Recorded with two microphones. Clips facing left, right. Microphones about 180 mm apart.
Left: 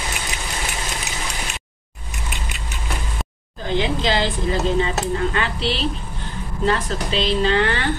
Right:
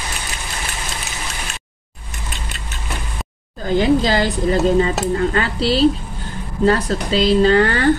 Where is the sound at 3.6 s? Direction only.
40° right (ahead or behind).